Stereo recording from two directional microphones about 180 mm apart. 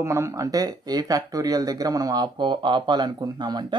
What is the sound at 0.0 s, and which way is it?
Speech, 15° right (ahead or behind).